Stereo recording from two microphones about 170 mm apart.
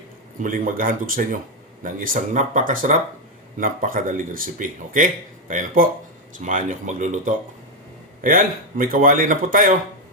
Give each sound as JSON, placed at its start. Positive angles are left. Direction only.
{"t": 0.4, "sound": "speech", "side_deg": -55}